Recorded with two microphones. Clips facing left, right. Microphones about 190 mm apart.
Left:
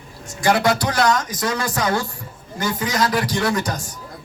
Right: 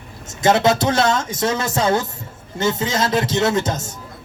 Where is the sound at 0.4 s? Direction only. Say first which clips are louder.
Right 3 dB; 25° right (ahead or behind).